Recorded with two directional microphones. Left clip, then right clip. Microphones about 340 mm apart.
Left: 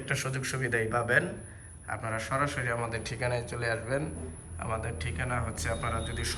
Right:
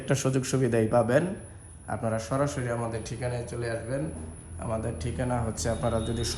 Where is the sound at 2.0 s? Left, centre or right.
Centre.